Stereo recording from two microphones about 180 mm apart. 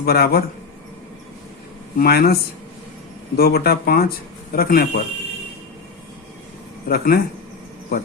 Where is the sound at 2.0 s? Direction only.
60° left (ahead or behind).